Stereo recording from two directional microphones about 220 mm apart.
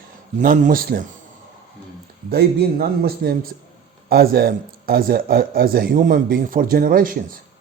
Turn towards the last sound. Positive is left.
turn(degrees=-40)  # may be behind; listen again after turning